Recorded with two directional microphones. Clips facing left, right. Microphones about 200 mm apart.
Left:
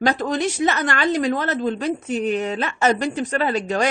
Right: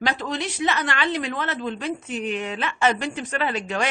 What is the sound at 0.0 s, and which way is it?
Speech, 45° left (ahead or behind).